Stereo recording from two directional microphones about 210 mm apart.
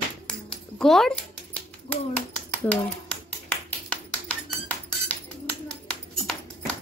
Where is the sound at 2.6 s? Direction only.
5° left (ahead or behind).